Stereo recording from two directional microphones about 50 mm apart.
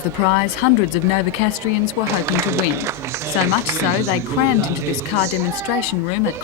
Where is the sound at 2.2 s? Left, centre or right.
Right.